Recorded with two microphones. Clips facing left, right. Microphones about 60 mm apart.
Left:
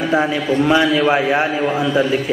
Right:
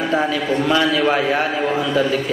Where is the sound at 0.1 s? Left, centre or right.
Centre.